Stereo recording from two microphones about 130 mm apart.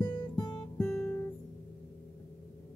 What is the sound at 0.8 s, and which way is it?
Guitar, 15° left (ahead or behind).